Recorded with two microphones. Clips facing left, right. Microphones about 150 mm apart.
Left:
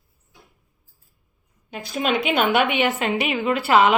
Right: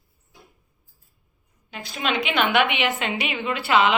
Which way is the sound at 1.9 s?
45° left (ahead or behind).